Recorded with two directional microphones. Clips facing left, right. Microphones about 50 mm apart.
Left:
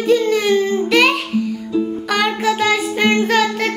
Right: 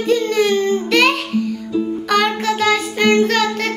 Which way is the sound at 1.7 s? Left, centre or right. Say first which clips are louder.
Right 2 dB; centre.